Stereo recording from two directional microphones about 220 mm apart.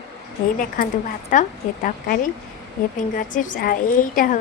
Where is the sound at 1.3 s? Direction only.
35° left (ahead or behind).